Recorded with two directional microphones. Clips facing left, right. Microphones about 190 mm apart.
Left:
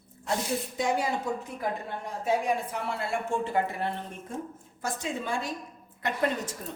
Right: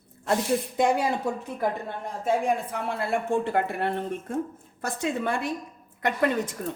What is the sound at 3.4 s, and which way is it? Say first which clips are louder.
A woman's voice: right 3 dB; 65° right (ahead or behind).